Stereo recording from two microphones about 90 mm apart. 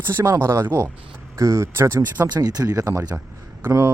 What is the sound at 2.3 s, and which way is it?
Speech, 50° right (ahead or behind).